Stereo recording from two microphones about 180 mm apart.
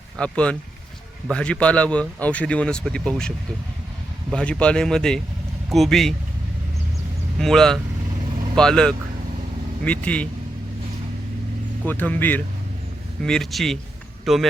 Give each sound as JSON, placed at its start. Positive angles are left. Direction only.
{"t": 0.2, "sound": "speech", "side_deg": 5}
{"t": 4.4, "sound": "speech", "side_deg": 5}
{"t": 7.3, "sound": "speech", "side_deg": 5}
{"t": 11.9, "sound": "speech", "side_deg": 10}